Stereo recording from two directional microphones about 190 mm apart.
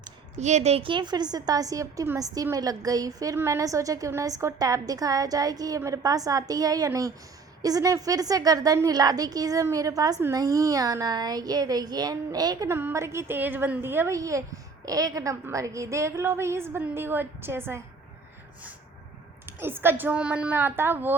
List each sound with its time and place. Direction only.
0.3 s a woman's voice: 35° right (ahead or behind); by 17.7 s 10° right (ahead or behind)
19.5 s a woman's voice: 10° right (ahead or behind)